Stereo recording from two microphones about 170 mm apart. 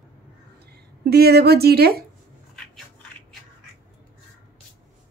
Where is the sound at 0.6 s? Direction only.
70° right (ahead or behind).